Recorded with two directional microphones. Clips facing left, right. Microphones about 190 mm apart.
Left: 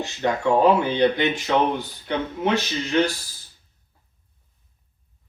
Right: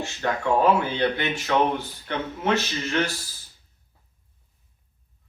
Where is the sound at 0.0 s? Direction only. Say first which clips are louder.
Left 4 dB; 15° left (ahead or behind).